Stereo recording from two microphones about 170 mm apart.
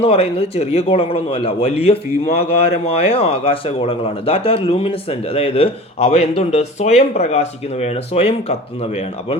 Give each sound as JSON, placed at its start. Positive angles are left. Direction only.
{"t": 0.0, "sound": "a man's voice", "side_deg": 35}